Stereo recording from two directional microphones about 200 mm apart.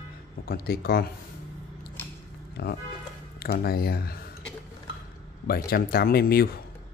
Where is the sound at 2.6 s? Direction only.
55° left (ahead or behind).